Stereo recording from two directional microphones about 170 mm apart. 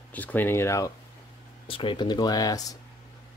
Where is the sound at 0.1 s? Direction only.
10° left (ahead or behind).